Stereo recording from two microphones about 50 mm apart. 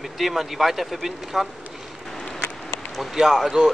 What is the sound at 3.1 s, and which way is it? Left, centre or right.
Speech, centre.